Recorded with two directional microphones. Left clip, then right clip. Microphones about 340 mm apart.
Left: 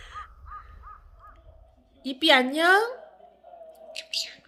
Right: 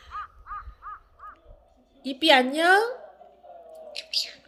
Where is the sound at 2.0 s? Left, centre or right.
Centre.